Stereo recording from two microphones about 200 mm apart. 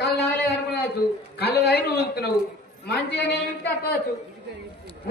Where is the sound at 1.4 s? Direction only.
50° left (ahead or behind).